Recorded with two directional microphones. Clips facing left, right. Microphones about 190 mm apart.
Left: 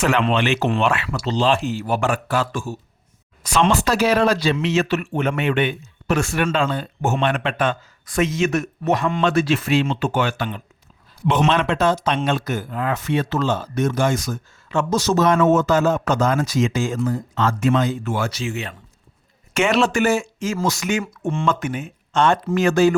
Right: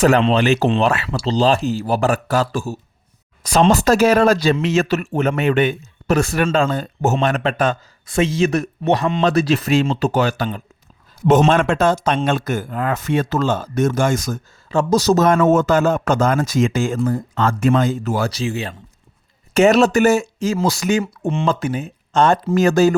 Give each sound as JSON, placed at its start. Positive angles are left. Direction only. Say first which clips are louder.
{"t": 0.0, "sound": "speech", "louder": "right 5 dB", "side_deg": -35}
{"t": 8.0, "sound": "speech", "louder": "right 3 dB", "side_deg": -25}